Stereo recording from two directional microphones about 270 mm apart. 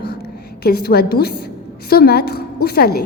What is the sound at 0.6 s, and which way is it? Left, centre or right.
A woman's voice, left.